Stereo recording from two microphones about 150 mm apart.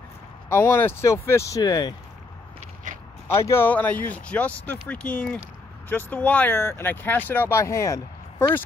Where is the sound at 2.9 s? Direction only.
60° right (ahead or behind).